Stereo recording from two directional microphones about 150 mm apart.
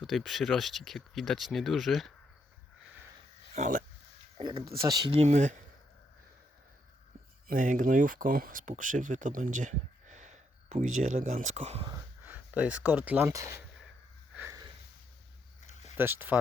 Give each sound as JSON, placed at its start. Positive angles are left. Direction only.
{"t": 0.0, "sound": "speech", "side_deg": 0}
{"t": 3.5, "sound": "a sound", "side_deg": -55}
{"t": 4.8, "sound": "speech", "side_deg": -25}
{"t": 5.1, "sound": "speech", "side_deg": -45}
{"t": 7.4, "sound": "speech", "side_deg": -55}
{"t": 12.2, "sound": "speech", "side_deg": -10}
{"t": 15.6, "sound": "a sound", "side_deg": 50}
{"t": 16.0, "sound": "speech", "side_deg": -15}